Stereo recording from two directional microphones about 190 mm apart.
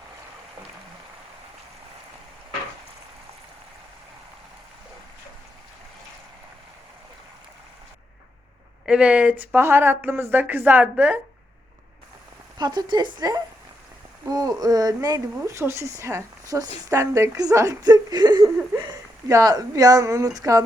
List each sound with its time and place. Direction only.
8.9 s speech: 5° right (ahead or behind)
12.5 s a sound: 20° right (ahead or behind)
15.4 s speech: 15° right (ahead or behind)